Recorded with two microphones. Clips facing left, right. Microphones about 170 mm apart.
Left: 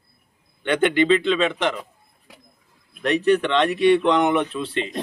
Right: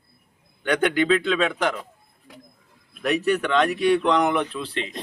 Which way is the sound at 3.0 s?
5° right (ahead or behind).